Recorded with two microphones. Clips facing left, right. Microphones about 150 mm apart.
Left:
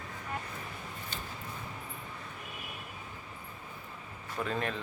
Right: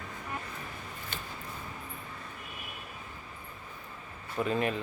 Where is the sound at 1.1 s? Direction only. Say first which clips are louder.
Right 1 dB; 60° right (ahead or behind).